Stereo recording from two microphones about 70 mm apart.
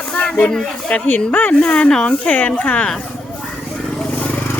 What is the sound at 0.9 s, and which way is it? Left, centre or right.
Speech, left.